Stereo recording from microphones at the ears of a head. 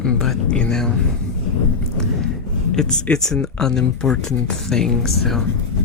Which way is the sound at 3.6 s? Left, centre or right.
Left.